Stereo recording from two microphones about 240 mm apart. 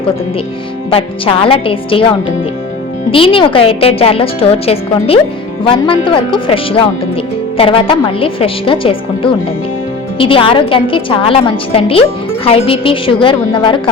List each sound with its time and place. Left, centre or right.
0.9 s a woman's voice: left
3.1 s a woman's voice: left